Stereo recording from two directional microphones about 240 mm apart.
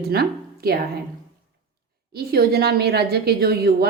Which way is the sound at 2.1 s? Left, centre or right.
Right.